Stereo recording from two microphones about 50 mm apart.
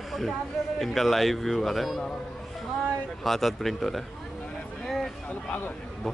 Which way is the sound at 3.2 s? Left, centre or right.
Centre.